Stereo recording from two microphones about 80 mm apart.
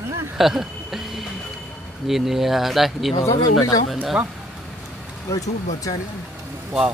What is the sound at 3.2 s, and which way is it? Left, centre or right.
Speech, left.